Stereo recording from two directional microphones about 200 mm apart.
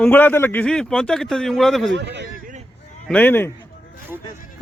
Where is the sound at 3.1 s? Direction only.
10° left (ahead or behind).